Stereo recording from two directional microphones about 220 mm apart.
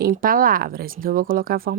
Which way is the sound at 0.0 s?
40° right (ahead or behind).